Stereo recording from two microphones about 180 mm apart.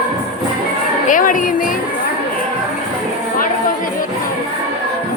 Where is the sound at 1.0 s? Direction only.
50° left (ahead or behind).